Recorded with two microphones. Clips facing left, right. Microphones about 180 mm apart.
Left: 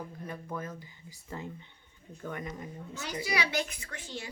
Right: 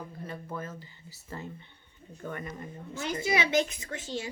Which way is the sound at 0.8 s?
15° left (ahead or behind).